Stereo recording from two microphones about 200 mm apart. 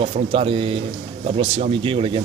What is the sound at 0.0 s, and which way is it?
Speech, 30° right (ahead or behind).